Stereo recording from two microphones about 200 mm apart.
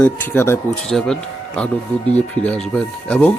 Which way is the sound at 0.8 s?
Centre (ahead or behind).